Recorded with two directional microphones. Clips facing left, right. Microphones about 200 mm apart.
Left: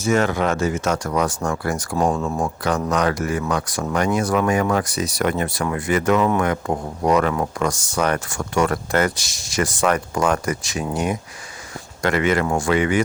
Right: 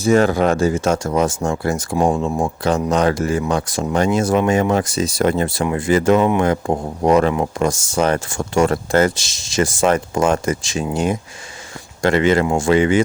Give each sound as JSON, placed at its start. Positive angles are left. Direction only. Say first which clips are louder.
{"t": 0.0, "sound": "speech", "louder": "right 5 dB", "side_deg": -35}